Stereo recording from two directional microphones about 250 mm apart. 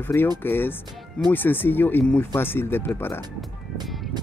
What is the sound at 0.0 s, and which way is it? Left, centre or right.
Speech, centre.